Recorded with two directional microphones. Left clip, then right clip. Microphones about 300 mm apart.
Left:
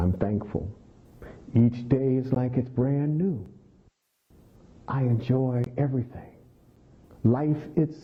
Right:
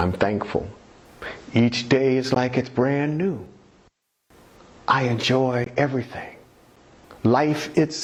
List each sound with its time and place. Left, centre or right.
0.0 s speech: centre
4.9 s speech: centre
7.1 s a sound: centre
7.4 s speech: centre